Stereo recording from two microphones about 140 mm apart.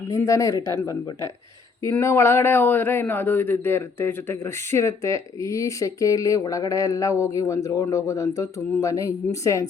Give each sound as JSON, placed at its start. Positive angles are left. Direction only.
{"t": 0.1, "sound": "a man's voice", "side_deg": 20}